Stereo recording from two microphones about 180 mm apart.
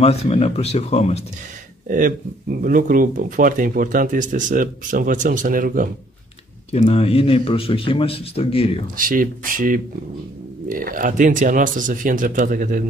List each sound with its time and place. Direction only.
0.0 s speech: 35° left (ahead or behind)
1.9 s speech: 50° right (ahead or behind)
6.7 s speech: 35° left (ahead or behind)
8.9 s speech: 50° right (ahead or behind)